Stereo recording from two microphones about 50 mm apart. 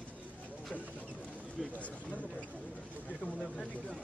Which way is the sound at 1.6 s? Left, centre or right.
Centre.